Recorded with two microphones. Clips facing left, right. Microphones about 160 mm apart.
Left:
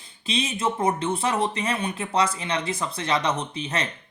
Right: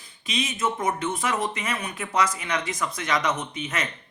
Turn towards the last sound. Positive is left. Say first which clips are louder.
# left 2 dB
turn(degrees=30)  # may be behind; listen again after turning